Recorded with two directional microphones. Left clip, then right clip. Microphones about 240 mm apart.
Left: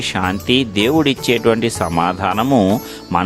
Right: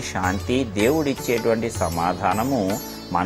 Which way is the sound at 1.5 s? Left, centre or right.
Left.